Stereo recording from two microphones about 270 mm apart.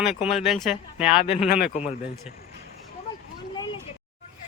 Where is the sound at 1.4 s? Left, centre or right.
Left.